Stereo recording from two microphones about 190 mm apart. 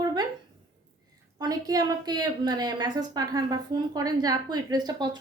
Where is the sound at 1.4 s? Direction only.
20° right (ahead or behind).